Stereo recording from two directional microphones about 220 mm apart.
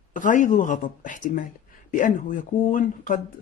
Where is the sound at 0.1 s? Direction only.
35° left (ahead or behind).